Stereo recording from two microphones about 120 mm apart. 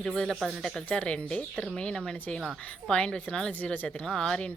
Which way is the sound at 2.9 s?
10° left (ahead or behind).